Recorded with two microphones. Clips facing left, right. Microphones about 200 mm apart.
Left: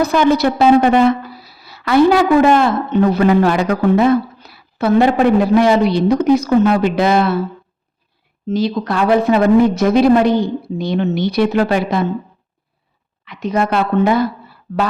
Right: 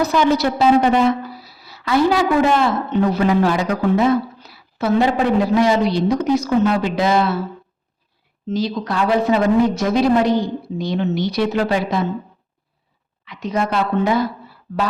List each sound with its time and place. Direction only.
0.0 s a woman's voice: 55° left (ahead or behind)
8.4 s a woman's voice: 55° left (ahead or behind)
13.2 s a woman's voice: 60° left (ahead or behind)